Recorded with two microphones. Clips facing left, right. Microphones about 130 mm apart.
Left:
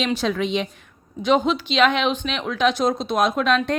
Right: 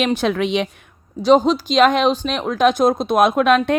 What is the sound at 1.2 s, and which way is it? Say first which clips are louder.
A woman's voice: right 5 dB; 35° right (ahead or behind).